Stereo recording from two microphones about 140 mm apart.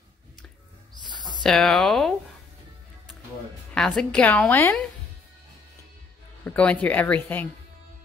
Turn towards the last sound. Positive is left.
turn(degrees=10)  # may be behind; listen again after turning